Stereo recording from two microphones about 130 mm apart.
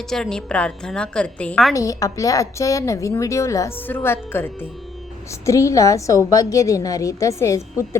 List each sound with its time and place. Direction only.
0.1 s a woman's voice: 5° left (ahead or behind)
1.7 s a woman's voice: 25° left (ahead or behind)